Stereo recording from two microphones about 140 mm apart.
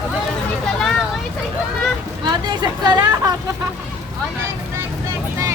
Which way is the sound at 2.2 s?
30° right (ahead or behind).